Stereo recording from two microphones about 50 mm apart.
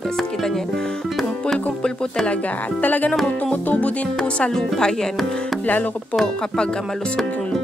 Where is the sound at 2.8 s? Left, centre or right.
Left.